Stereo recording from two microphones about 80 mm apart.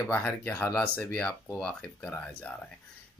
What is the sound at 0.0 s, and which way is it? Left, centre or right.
Speech, centre.